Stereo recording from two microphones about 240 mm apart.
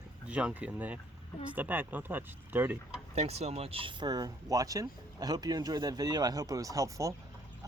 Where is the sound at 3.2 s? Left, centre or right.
Right.